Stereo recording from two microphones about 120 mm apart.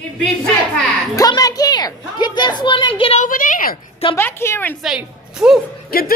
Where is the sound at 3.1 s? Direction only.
90° left.